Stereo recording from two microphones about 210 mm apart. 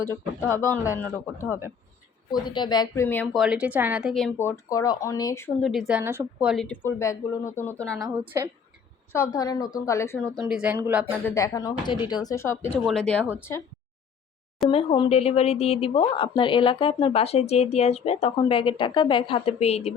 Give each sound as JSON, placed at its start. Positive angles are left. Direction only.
{"t": 0.0, "sound": "speech", "side_deg": 10}
{"t": 3.3, "sound": "speech", "side_deg": -5}
{"t": 5.6, "sound": "speech", "side_deg": 0}
{"t": 6.0, "sound": "speech", "side_deg": -10}
{"t": 8.4, "sound": "a woman's voice", "side_deg": -15}
{"t": 9.1, "sound": "speech", "side_deg": 15}
{"t": 10.3, "sound": "speech", "side_deg": -5}
{"t": 11.3, "sound": "speech", "side_deg": 15}
{"t": 12.8, "sound": "speech", "side_deg": 0}
{"t": 14.7, "sound": "speech", "side_deg": 25}